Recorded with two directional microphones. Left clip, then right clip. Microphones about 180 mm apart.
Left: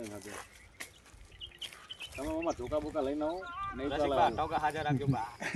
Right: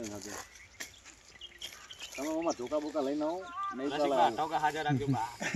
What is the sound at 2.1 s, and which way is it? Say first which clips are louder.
Speech: right 2 dB; 45° right (ahead or behind).